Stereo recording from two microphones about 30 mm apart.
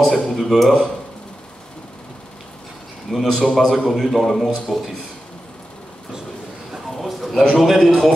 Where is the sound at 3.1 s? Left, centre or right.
Left.